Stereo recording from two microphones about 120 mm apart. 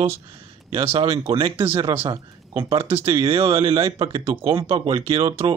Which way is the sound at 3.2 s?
45° right (ahead or behind).